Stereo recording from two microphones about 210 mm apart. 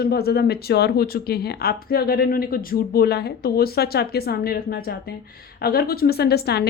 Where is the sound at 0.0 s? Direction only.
50° left (ahead or behind).